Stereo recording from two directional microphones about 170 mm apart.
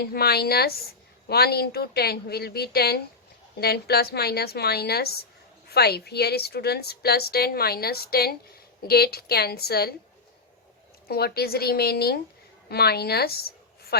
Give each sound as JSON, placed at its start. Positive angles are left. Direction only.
{"t": 0.0, "sound": "a woman's voice", "side_deg": 65}
{"t": 11.1, "sound": "a woman's voice", "side_deg": 65}